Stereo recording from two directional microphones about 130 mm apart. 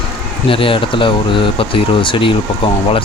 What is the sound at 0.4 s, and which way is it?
Speech, 45° left (ahead or behind).